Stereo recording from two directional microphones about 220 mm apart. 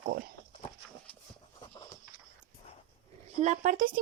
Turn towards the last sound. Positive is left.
turn(degrees=-40)  # may be behind; listen again after turning